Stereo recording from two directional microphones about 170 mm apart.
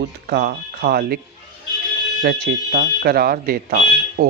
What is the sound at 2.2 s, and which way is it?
Speech, 75° right (ahead or behind).